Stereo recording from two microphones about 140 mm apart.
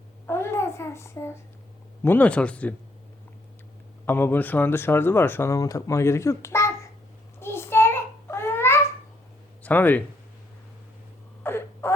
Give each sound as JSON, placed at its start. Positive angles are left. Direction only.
{"t": 0.3, "sound": "a child's voice", "side_deg": 20}
{"t": 4.0, "sound": "speech", "side_deg": 15}
{"t": 7.3, "sound": "a sound", "side_deg": 15}
{"t": 9.6, "sound": "speech", "side_deg": 15}
{"t": 11.4, "sound": "whimper", "side_deg": 15}